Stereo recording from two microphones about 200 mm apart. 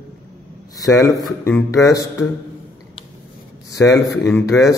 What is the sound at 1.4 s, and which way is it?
Speech, 15° left (ahead or behind).